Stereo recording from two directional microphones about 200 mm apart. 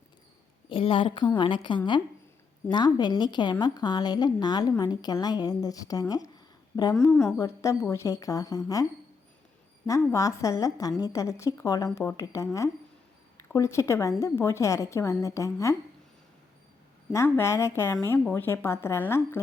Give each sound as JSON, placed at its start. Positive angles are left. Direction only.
{"t": 0.7, "sound": "a woman's voice", "side_deg": 25}
{"t": 7.3, "sound": "a woman's voice", "side_deg": 15}
{"t": 10.1, "sound": "a woman's voice", "side_deg": 15}
{"t": 17.1, "sound": "a woman's voice", "side_deg": 10}